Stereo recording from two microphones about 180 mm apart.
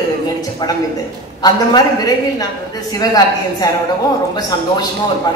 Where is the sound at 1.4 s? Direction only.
20° left (ahead or behind).